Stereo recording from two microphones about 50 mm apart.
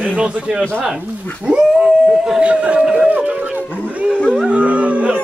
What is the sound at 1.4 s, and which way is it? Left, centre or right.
Dog, centre.